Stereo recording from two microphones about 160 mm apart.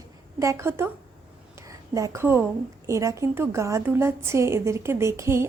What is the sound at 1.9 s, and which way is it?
A woman's voice, 20° right (ahead or behind).